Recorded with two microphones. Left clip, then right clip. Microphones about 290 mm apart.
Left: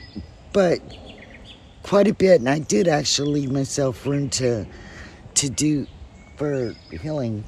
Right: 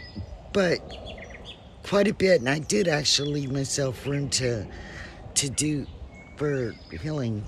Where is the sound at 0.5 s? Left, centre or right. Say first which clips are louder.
Left 5 dB; centre.